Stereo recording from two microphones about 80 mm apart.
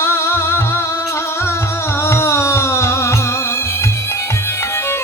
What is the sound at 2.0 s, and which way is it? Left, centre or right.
Carnatic music, left.